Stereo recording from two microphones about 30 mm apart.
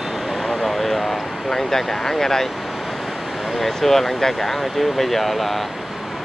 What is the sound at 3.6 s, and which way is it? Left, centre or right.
Speech, centre.